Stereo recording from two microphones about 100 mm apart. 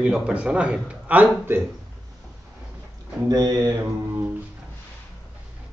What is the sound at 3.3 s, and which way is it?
Speech, 40° right (ahead or behind).